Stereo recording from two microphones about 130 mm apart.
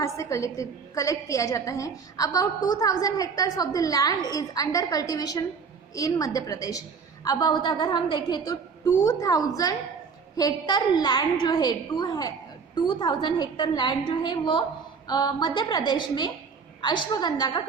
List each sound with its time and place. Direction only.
0.0 s a woman's voice: 25° left (ahead or behind)